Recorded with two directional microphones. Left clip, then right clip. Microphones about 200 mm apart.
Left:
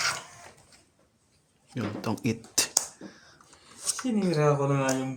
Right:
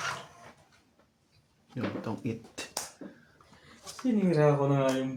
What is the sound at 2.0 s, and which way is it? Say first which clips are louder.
Speech: left 5 dB; 50° left (ahead or behind).